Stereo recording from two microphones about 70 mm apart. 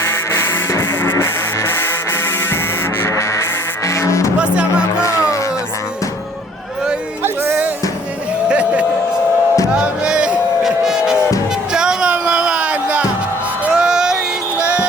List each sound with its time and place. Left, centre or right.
0.0 s music: left
3.8 s music: left
4.4 s music: centre
7.4 s music: right
11.7 s a sound: centre
13.7 s music: centre